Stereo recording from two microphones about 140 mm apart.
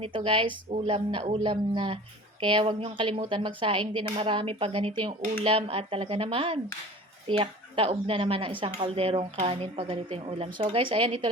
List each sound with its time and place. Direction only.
0.0 s speech: 40° right (ahead or behind)